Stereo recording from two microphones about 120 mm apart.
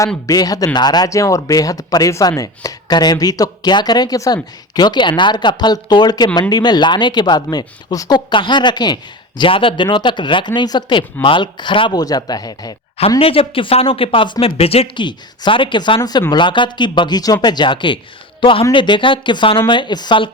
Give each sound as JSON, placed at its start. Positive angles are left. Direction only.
{"t": 0.3, "sound": "speech", "side_deg": 30}
{"t": 13.0, "sound": "a man's voice", "side_deg": 50}
{"t": 14.6, "sound": "a man's voice", "side_deg": 55}